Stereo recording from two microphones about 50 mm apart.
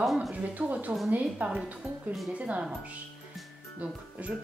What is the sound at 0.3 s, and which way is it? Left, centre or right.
Speech, right.